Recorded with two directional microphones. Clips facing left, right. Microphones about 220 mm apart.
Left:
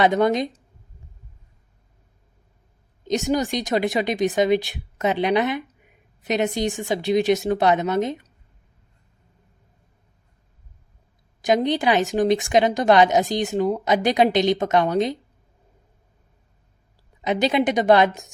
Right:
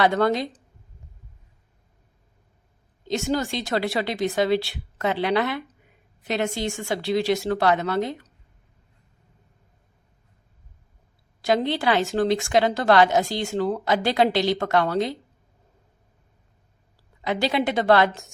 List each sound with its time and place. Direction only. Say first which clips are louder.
0.0 s speech: left 2 dB; 20° left (ahead or behind)
3.0 s speech: left 3 dB; 15° left (ahead or behind)
11.4 s speech: left 2 dB; 15° left (ahead or behind)
17.2 s a woman's voice: left 3 dB; 20° left (ahead or behind)